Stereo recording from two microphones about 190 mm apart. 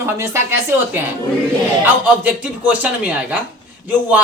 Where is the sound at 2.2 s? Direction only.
5° right (ahead or behind).